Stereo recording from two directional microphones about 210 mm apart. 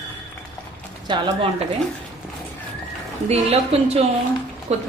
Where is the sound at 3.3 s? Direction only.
30° right (ahead or behind).